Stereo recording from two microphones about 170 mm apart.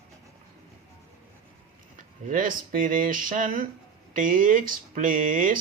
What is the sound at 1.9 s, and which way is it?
Speech, 50° right (ahead or behind).